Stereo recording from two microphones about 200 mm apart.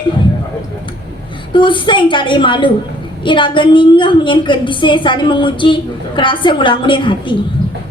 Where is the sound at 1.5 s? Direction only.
25° left (ahead or behind).